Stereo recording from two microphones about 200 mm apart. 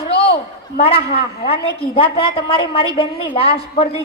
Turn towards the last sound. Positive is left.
turn(degrees=30)  # may be behind; listen again after turning